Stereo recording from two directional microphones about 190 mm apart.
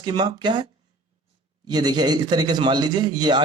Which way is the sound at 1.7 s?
20° right (ahead or behind).